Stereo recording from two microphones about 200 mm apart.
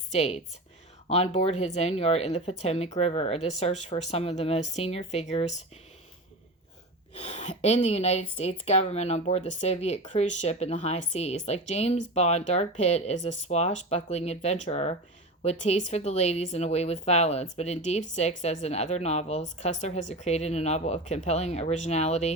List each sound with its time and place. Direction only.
0.1 s speech: 35° left (ahead or behind)
7.2 s speech: 35° left (ahead or behind)